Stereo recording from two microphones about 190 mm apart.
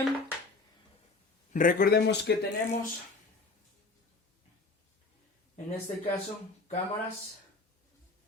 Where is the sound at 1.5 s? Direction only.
45° left (ahead or behind).